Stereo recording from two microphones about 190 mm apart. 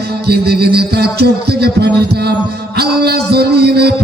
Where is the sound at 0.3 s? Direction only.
55° right (ahead or behind).